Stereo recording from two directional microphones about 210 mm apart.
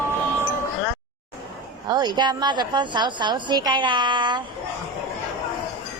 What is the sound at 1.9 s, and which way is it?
A woman's voice, 20° right (ahead or behind).